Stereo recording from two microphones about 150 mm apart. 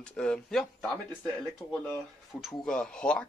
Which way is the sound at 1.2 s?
15° left (ahead or behind).